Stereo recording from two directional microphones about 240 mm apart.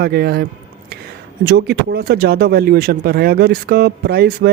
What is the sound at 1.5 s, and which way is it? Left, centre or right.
Speech, right.